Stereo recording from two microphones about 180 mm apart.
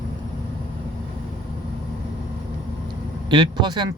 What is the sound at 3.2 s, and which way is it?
Speech, 25° right (ahead or behind).